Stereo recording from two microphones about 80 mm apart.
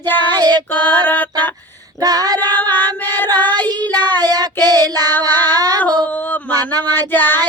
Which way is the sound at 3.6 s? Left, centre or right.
Right.